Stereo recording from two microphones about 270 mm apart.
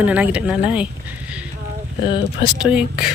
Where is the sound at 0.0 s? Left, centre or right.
Centre.